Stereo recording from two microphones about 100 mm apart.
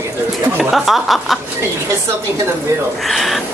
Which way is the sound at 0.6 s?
Centre (ahead or behind).